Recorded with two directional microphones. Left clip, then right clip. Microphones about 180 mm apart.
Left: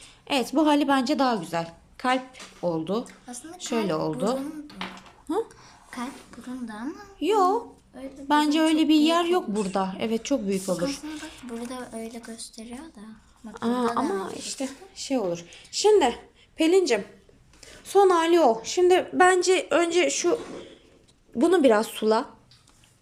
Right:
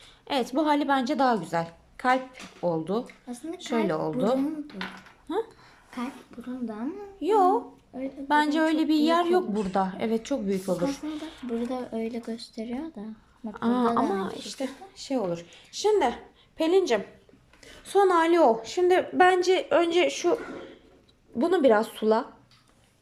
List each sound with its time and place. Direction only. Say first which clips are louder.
0.0 s a woman's voice: left 2 dB; 5° left (ahead or behind)
3.0 s speech: even; 25° right (ahead or behind)
3.6 s a woman's voice: left 1 dB; 5° left (ahead or behind)
5.9 s speech: left 1 dB; 5° right (ahead or behind)
7.2 s a woman's voice: even; 5° left (ahead or behind)
11.4 s speech: right 6 dB; 15° right (ahead or behind)
13.5 s a woman's voice: right 1 dB; centre (ahead or behind)